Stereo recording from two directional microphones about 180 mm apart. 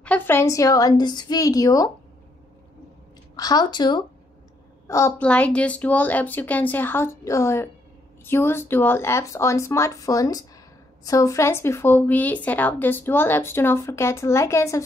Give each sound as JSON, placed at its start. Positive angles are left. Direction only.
{"t": 0.0, "sound": "a woman's voice", "side_deg": 10}
{"t": 3.3, "sound": "a woman's voice", "side_deg": 20}